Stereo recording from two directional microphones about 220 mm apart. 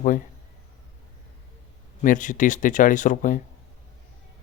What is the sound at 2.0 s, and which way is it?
Speech, 35° left (ahead or behind).